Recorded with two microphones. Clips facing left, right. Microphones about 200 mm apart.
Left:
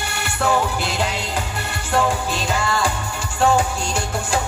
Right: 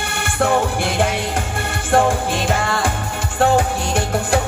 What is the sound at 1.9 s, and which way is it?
Music, 50° right (ahead or behind).